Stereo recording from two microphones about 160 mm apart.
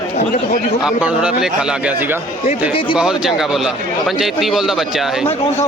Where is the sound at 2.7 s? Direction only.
30° left (ahead or behind).